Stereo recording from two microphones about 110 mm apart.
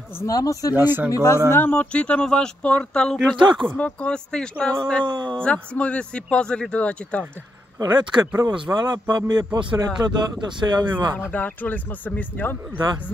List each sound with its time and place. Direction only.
0.2 s speech: 30° left (ahead or behind)
0.7 s speech: 20° right (ahead or behind)
1.1 s speech: 30° left (ahead or behind)
1.5 s speech: 20° left (ahead or behind)
3.3 s speech: 45° right (ahead or behind)
3.7 s speech: 10° left (ahead or behind)
5.0 s speech: 40° right (ahead or behind)
5.4 s speech: 10° left (ahead or behind)
7.8 s speech: 40° right (ahead or behind)
11.2 s speech: 15° left (ahead or behind)